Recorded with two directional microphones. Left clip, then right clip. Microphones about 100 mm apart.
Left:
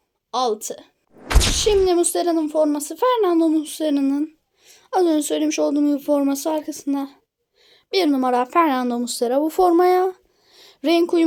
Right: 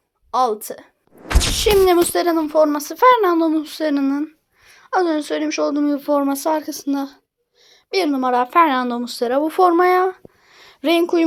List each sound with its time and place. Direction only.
0.3 s speech: 5° left (ahead or behind)
2.5 s speech: 20° left (ahead or behind)
4.2 s speech: 60° left (ahead or behind)
5.9 s a woman's voice: 35° left (ahead or behind)
6.5 s speech: 10° right (ahead or behind)
6.7 s speech: centre (ahead or behind)
7.7 s a sound: 25° left (ahead or behind)
8.1 s a woman's voice: 35° left (ahead or behind); by 11.3 s 15° left (ahead or behind)